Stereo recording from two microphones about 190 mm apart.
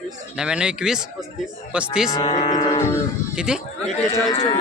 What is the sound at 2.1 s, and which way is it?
Speech, 20° left (ahead or behind).